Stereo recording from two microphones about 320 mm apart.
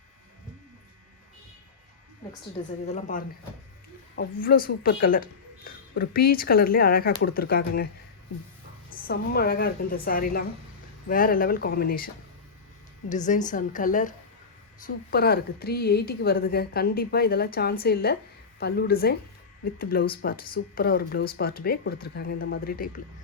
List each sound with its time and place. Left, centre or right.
2.9 s speech: left
8.9 s speech: left